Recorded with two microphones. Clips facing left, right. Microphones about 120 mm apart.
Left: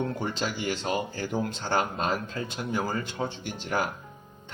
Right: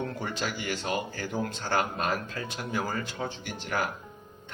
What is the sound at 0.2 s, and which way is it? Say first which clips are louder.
Speech: left 2 dB; 25° left (ahead or behind).